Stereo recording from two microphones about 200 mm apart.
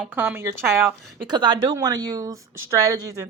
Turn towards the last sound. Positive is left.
turn(degrees=-15)  # may be behind; listen again after turning